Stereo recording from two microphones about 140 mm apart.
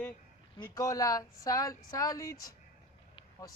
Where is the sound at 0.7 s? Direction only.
25° left (ahead or behind).